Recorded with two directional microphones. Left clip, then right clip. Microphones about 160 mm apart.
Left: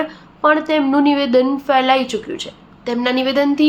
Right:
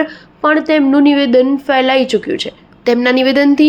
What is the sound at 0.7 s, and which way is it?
A woman's voice, 25° right (ahead or behind).